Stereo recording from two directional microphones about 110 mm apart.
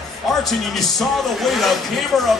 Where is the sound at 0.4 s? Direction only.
Centre (ahead or behind).